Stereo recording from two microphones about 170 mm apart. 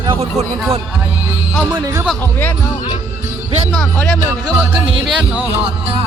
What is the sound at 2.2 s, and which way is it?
Speech, 10° left (ahead or behind).